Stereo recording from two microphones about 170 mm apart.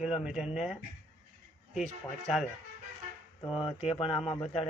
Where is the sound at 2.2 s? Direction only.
Centre (ahead or behind).